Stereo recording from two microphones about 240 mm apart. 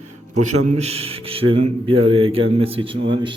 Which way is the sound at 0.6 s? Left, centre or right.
Right.